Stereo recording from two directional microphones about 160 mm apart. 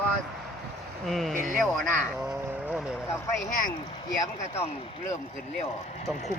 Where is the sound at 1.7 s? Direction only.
5° right (ahead or behind).